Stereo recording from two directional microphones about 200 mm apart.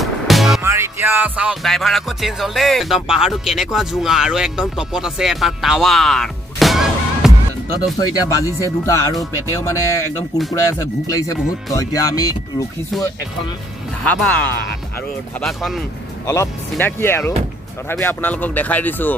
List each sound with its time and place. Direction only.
0.0 s music: centre (ahead or behind)
0.6 s music: 10° right (ahead or behind)
8.1 s speech: 15° left (ahead or behind)
14.0 s speech: 5° left (ahead or behind)
15.4 s music: centre (ahead or behind)
16.3 s speech: 15° left (ahead or behind)